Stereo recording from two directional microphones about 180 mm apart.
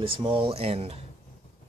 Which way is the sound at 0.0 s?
30° right (ahead or behind).